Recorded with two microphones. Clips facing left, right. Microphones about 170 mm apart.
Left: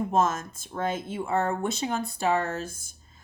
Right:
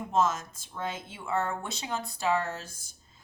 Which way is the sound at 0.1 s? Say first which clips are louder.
Right 3 dB; 50° left (ahead or behind).